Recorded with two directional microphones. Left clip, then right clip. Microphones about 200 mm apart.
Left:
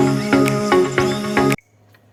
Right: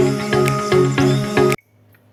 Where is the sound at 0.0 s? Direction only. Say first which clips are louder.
Even; centre (ahead or behind).